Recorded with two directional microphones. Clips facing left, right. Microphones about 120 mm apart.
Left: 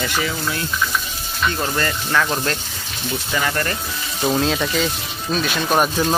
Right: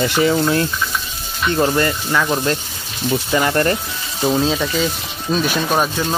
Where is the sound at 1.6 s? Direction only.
20° right (ahead or behind).